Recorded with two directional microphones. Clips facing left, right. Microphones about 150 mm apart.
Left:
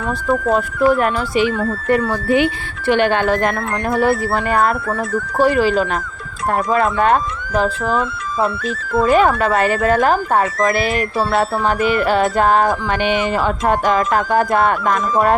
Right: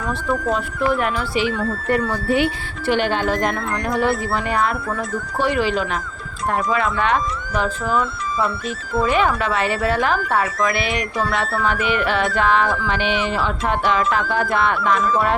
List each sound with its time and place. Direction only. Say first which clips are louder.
0.3 s music: left 6 dB; 50° left (ahead or behind)
1.9 s speech: left 4 dB; 90° left
2.8 s speech: left 4 dB; 60° left (ahead or behind)
3.9 s music: left 4 dB; 55° left (ahead or behind)
5.4 s speech: left 5 dB; 40° left (ahead or behind)
6.7 s music: left 6 dB; 45° left (ahead or behind)